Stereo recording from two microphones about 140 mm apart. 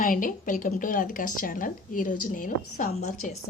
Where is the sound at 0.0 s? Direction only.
75° left (ahead or behind).